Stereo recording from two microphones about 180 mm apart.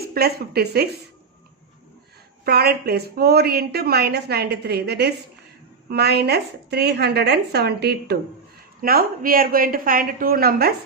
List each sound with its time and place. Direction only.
0.1 s a woman's voice: 60° right (ahead or behind)
2.4 s a woman's voice: 60° right (ahead or behind)